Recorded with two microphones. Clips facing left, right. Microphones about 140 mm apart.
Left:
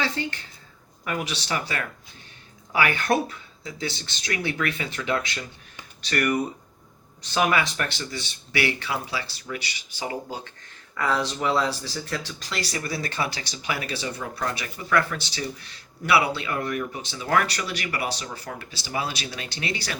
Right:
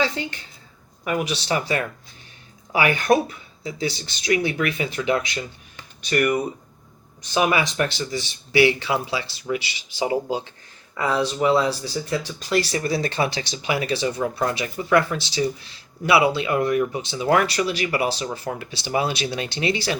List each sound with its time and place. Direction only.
0.0 s speech: 15° right (ahead or behind)